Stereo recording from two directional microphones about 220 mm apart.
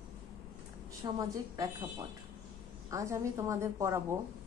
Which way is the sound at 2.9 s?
15° right (ahead or behind).